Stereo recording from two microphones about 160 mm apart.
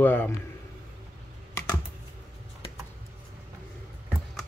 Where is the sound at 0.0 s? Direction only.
10° left (ahead or behind).